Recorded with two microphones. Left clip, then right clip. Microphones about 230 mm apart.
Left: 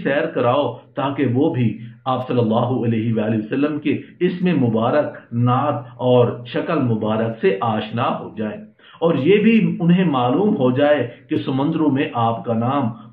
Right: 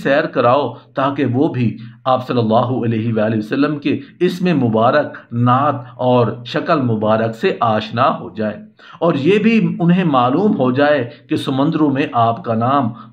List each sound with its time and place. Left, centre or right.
0.0 s speech: right